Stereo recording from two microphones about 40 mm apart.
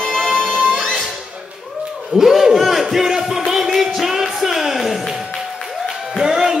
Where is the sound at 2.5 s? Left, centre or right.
Centre.